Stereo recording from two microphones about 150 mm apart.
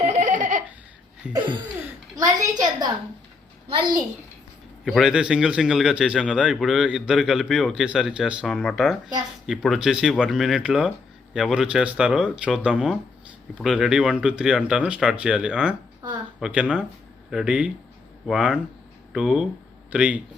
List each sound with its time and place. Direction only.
0.1 s a sound: 55° right (ahead or behind)
1.3 s a child's voice: 30° right (ahead or behind)
4.9 s a man's voice: centre (ahead or behind)